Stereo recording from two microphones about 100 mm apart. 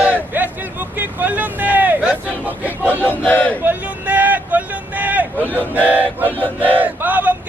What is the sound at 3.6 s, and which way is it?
Vehicle, 15° right (ahead or behind).